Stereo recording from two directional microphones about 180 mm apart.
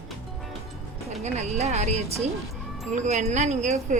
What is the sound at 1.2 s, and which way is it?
Speech, 40° right (ahead or behind).